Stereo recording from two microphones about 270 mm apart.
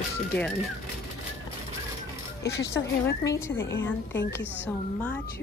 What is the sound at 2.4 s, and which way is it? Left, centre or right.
Speech, centre.